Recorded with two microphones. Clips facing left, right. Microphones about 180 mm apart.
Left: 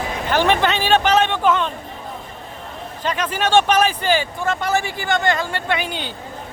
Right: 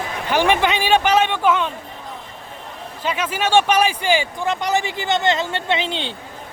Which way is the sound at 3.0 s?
10° right (ahead or behind).